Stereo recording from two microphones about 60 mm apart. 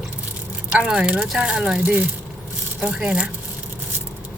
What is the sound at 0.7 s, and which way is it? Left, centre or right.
Speech, centre.